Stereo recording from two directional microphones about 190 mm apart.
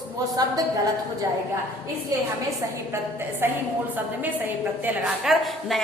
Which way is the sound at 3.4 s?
10° right (ahead or behind).